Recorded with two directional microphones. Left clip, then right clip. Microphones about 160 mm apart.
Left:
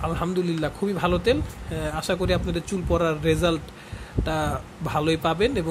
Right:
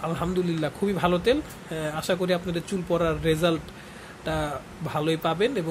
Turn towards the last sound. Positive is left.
turn(degrees=15)  # may be behind; listen again after turning